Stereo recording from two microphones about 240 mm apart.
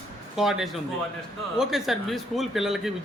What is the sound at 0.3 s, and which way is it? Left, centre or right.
Speech, centre.